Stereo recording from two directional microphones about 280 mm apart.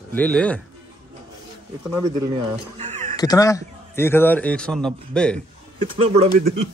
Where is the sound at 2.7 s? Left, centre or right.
Right.